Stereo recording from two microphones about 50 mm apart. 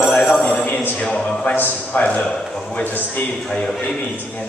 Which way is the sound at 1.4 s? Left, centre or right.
Left.